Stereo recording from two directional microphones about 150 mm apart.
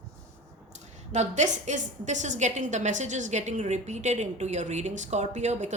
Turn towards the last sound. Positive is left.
turn(degrees=-50)  # may be behind; listen again after turning